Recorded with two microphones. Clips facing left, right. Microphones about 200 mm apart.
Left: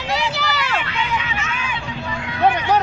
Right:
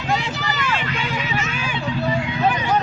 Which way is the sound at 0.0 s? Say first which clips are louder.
Left 1 dB; 80° left.